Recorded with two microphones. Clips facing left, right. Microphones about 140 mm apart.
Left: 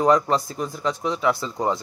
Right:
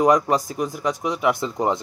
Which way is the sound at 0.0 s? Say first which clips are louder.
Right 1 dB; 15° right (ahead or behind).